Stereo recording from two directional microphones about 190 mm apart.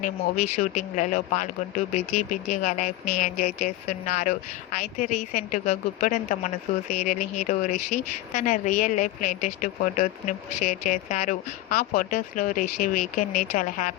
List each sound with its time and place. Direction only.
0.6 s a woman's voice: 40° left (ahead or behind)